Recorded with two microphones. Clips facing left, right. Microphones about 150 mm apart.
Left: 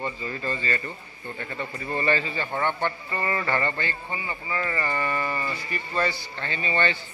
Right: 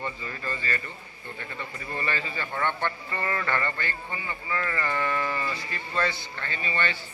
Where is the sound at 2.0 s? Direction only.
30° left (ahead or behind); by 6.1 s 10° left (ahead or behind).